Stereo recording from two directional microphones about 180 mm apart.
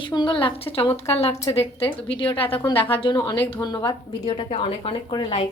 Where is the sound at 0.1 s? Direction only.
25° left (ahead or behind).